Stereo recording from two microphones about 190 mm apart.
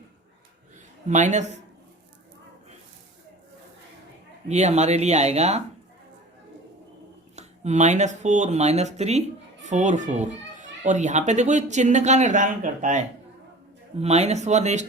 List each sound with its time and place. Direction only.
1.0 s a child's voice: 40° right (ahead or behind)
4.4 s a child's voice: 35° right (ahead or behind)
7.3 s a child's voice: 35° right (ahead or behind)